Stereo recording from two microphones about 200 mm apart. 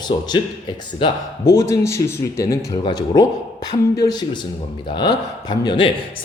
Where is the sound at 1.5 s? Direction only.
15° left (ahead or behind).